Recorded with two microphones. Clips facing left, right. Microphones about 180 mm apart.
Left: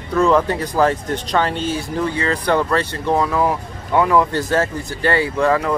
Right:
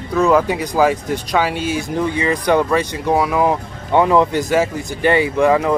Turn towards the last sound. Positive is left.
turn(degrees=-15)  # may be behind; listen again after turning